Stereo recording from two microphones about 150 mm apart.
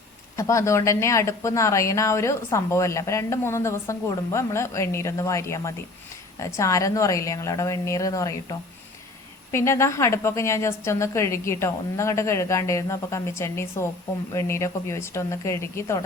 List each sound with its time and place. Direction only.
0.3 s speech: 20° left (ahead or behind)